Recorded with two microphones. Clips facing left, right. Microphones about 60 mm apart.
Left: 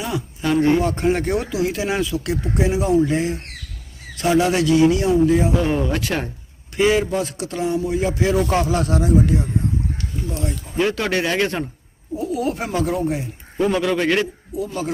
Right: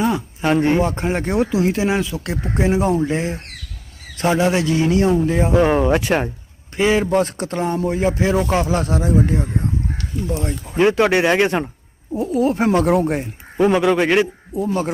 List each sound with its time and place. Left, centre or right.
0.0 s speech: right
5.9 s speech: right
7.1 s speech: right
8.0 s speech: right
10.5 s speech: right
12.6 s speech: right
13.6 s speech: right
14.5 s speech: right